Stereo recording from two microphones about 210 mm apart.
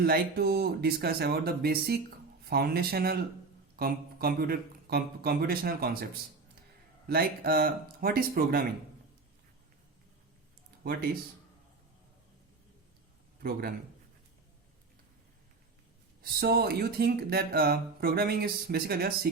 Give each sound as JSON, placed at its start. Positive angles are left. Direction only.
{"t": 0.0, "sound": "speech", "side_deg": -45}
{"t": 7.1, "sound": "speech", "side_deg": -45}
{"t": 13.4, "sound": "speech", "side_deg": -45}
{"t": 16.2, "sound": "speech", "side_deg": -45}